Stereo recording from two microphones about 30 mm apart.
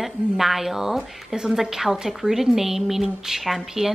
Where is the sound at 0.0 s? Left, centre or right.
Centre.